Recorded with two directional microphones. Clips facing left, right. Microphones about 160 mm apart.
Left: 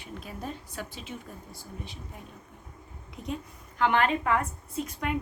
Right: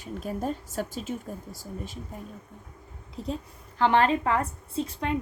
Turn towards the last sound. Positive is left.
turn(degrees=-30)  # may be behind; listen again after turning